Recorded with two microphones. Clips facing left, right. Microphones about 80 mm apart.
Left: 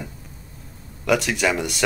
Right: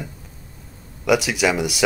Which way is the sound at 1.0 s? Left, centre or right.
Centre.